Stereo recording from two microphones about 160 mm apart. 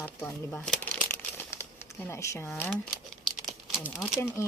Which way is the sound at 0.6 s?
5° left (ahead or behind).